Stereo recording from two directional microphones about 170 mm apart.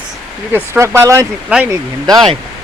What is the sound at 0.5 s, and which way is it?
Speech, 15° right (ahead or behind).